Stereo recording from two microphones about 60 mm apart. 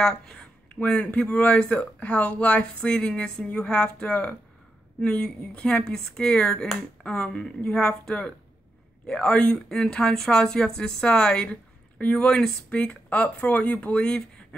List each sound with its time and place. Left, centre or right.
0.0 s speech: centre